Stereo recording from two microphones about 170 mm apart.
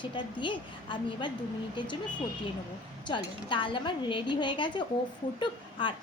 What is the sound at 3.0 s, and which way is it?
A woman's voice, 30° left (ahead or behind).